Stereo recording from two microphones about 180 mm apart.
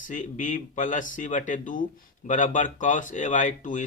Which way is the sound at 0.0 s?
45° left (ahead or behind).